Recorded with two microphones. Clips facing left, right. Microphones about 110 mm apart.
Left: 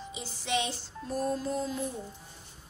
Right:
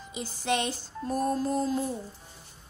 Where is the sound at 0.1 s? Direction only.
45° right (ahead or behind).